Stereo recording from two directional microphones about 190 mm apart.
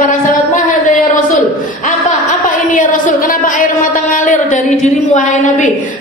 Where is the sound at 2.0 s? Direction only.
40° left (ahead or behind).